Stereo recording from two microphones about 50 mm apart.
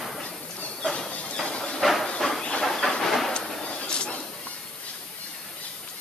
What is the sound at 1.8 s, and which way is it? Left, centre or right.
Train, centre.